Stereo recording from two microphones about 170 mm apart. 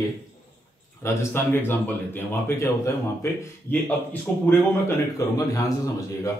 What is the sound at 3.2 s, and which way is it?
Speech, 15° left (ahead or behind).